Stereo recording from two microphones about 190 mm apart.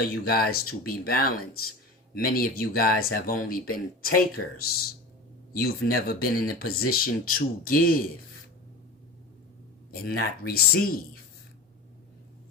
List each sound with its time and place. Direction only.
0.3 s speech: 50° left (ahead or behind)
9.9 s speech: 55° left (ahead or behind)